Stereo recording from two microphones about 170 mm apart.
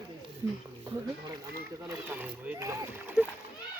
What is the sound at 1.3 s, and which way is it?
Speech, 20° right (ahead or behind).